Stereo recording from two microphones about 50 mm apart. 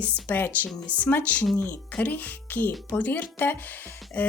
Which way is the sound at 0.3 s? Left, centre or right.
Left.